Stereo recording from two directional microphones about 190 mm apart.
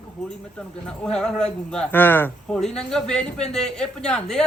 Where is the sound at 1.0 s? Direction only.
5° left (ahead or behind).